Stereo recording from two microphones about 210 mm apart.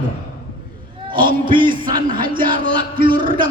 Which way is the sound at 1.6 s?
40° right (ahead or behind).